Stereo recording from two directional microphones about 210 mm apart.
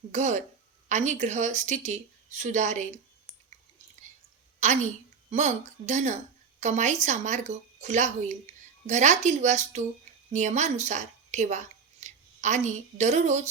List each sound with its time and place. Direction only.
0.1 s speech: 35° right (ahead or behind)
4.6 s speech: 35° right (ahead or behind)